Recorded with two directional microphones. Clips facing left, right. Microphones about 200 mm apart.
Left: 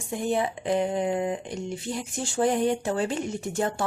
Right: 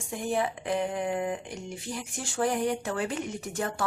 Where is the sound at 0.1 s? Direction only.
25° left (ahead or behind).